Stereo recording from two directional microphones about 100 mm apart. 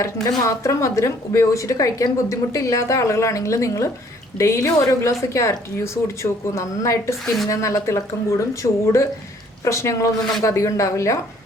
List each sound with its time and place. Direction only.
0.0 s a woman's voice: 30° left (ahead or behind)
10.2 s a man's voice: 5° left (ahead or behind)
10.4 s a woman's voice: 30° left (ahead or behind)